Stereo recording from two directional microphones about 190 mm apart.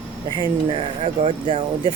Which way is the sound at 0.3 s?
30° right (ahead or behind).